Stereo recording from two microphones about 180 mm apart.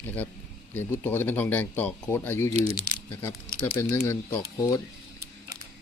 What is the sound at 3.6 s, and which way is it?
Speech, 15° left (ahead or behind).